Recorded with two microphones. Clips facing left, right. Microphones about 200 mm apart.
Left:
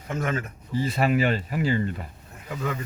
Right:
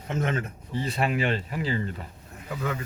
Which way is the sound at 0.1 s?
25° right (ahead or behind).